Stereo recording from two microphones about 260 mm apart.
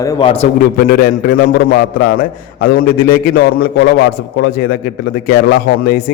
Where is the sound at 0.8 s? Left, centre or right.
Left.